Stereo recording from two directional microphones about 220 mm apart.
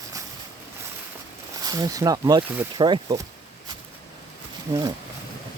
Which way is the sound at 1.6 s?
15° right (ahead or behind).